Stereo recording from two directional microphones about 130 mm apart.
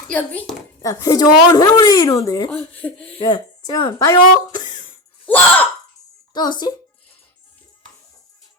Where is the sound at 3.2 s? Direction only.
35° left (ahead or behind).